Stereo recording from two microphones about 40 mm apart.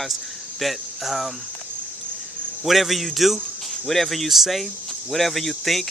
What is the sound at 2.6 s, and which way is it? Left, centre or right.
Speech, centre.